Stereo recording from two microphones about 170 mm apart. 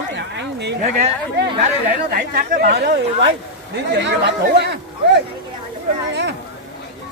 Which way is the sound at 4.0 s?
90° right.